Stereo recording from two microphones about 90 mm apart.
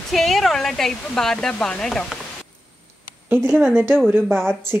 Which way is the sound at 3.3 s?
25° right (ahead or behind).